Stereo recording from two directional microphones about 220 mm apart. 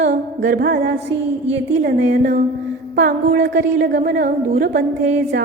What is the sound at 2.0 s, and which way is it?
Speech, 40° right (ahead or behind).